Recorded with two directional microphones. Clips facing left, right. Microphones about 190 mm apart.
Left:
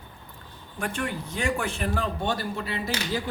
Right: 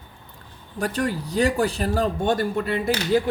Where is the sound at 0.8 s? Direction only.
40° right (ahead or behind).